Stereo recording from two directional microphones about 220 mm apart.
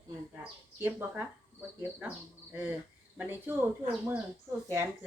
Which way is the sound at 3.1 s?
10° right (ahead or behind).